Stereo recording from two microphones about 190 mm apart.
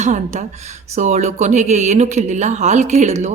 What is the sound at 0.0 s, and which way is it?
Speech, 40° right (ahead or behind).